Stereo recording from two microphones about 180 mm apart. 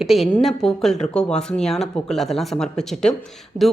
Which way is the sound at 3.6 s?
40° right (ahead or behind).